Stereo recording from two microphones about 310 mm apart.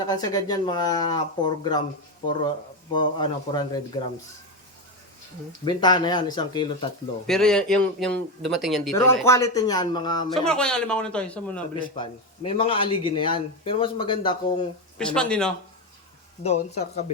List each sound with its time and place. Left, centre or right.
0.0 s speech: centre
2.9 s speech: centre
5.6 s speech: centre
7.3 s speech: centre
10.3 s speech: centre
11.8 s speech: centre
14.9 s speech: centre
16.4 s speech: left